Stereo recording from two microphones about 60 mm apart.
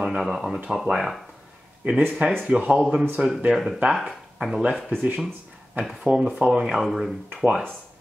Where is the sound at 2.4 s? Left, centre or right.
Right.